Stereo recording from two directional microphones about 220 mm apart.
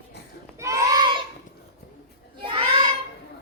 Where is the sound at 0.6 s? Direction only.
15° right (ahead or behind).